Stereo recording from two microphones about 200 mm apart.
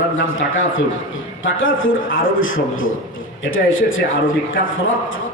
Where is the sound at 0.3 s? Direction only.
75° left (ahead or behind).